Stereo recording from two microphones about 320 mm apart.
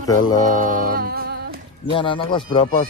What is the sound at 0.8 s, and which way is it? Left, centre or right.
Music, right.